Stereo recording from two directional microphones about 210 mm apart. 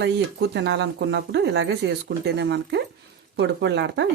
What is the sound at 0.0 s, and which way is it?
Speech, 55° right (ahead or behind).